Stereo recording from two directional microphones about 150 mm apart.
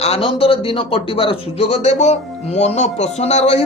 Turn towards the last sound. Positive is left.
turn(degrees=45)  # may be behind; listen again after turning